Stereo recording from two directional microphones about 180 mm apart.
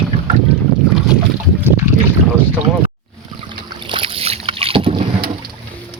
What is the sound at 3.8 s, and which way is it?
Boat, 30° right (ahead or behind).